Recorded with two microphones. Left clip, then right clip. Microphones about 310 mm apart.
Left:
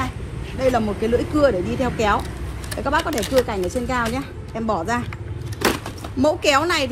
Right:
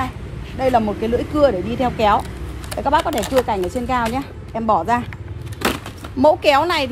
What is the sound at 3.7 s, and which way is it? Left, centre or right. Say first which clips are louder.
Speech: right 3 dB; right.